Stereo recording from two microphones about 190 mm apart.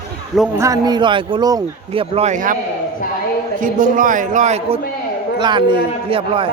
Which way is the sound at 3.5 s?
45° right (ahead or behind).